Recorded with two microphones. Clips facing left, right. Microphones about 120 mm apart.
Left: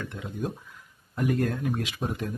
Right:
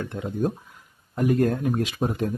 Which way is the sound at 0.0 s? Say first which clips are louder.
Right 7 dB; 40° right (ahead or behind).